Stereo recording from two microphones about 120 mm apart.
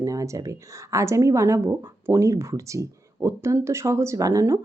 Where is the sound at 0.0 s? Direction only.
25° right (ahead or behind).